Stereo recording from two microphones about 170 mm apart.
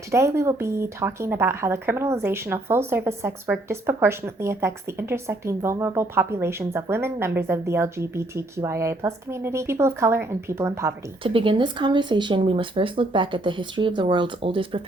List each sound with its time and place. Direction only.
0.1 s speech: 15° right (ahead or behind)
11.2 s speech: 30° right (ahead or behind)